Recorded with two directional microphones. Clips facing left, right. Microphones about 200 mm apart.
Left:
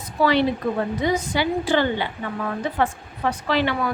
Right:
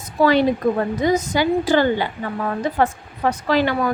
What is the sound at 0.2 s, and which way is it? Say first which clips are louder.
A woman's voice: right 3 dB; 45° right (ahead or behind).